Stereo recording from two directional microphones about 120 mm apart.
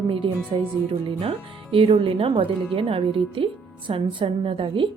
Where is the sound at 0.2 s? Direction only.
45° right (ahead or behind).